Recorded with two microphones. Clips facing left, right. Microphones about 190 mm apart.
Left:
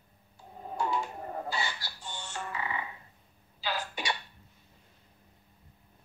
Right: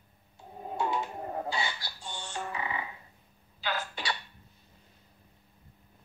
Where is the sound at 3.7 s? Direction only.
20° left (ahead or behind).